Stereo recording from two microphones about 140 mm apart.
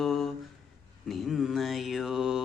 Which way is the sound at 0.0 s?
Centre (ahead or behind).